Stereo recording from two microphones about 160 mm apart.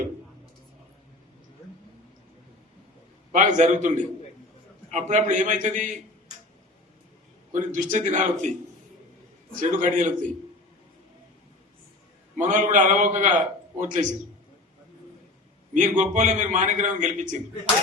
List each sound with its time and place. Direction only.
3.3 s a man's voice: 50° right (ahead or behind)
7.5 s a man's voice: 50° right (ahead or behind)
9.6 s a man's voice: 50° right (ahead or behind)
12.4 s a man's voice: 50° right (ahead or behind)
15.7 s a man's voice: 50° right (ahead or behind)